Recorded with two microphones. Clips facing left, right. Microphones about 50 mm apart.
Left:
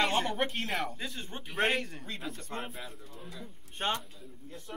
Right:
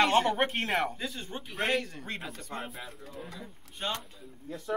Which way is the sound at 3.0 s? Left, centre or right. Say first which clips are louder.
Right 5 dB; right.